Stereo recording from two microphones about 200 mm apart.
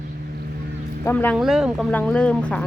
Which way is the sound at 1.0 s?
10° left (ahead or behind).